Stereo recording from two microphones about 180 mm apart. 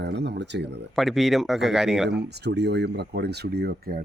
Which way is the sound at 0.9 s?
Centre (ahead or behind).